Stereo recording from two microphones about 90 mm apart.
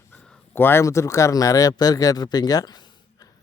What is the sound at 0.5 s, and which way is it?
Speech, 25° left (ahead or behind).